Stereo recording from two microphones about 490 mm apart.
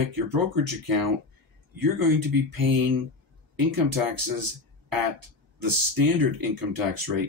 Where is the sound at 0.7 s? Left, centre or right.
Right.